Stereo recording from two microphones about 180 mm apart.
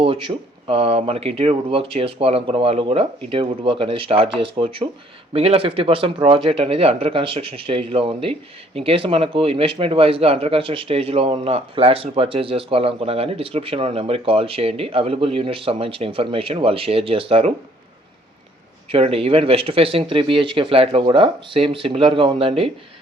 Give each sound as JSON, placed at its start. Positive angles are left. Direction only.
{"t": 0.0, "sound": "speech", "side_deg": -30}
{"t": 18.9, "sound": "speech", "side_deg": -30}